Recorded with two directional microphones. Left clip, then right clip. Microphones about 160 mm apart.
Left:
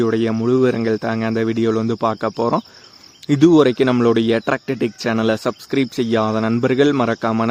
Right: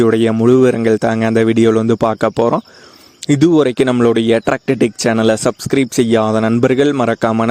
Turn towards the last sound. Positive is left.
turn(degrees=-50)  # may be behind; listen again after turning